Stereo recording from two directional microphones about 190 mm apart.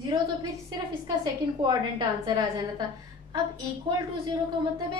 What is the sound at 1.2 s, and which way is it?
A woman's voice, 25° right (ahead or behind).